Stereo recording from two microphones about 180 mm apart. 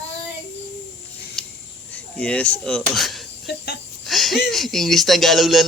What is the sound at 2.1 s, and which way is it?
Speech, 5° left (ahead or behind).